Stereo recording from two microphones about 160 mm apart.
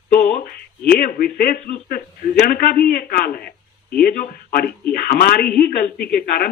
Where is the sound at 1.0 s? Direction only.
65° left (ahead or behind).